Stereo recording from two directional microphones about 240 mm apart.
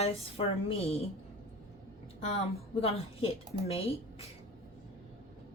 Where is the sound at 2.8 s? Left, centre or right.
Left.